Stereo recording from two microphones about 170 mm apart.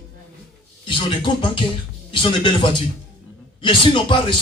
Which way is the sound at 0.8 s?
30° left (ahead or behind).